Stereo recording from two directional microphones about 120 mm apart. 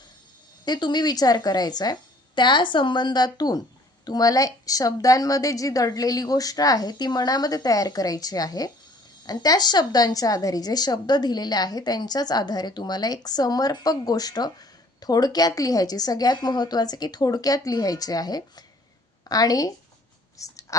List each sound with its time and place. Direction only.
0.6 s a woman's voice: 35° left (ahead or behind)